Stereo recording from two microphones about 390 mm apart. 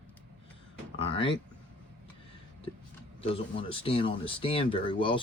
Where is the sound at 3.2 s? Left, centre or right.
Centre.